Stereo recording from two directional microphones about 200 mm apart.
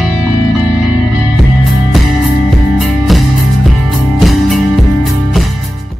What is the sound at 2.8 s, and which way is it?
Music, centre (ahead or behind).